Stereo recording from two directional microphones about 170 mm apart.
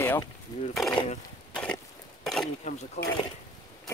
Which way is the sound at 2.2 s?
Centre (ahead or behind).